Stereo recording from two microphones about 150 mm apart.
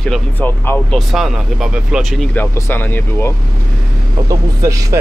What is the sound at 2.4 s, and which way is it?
Speech, 15° left (ahead or behind).